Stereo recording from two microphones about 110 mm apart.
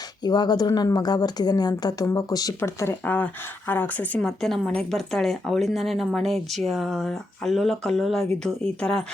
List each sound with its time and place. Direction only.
0.2 s a woman's voice: 40° left (ahead or behind); by 4.3 s 15° left (ahead or behind)
4.3 s speech: 5° left (ahead or behind)